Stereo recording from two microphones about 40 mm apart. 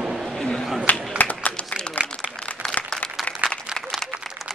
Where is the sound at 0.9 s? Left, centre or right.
Left.